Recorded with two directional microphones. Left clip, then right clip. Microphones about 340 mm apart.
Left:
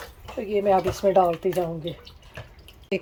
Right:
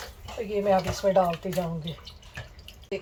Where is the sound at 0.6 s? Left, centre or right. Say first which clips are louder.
Left 3 dB; left.